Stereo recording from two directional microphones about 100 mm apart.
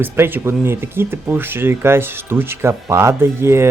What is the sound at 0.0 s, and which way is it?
Speech, 20° right (ahead or behind).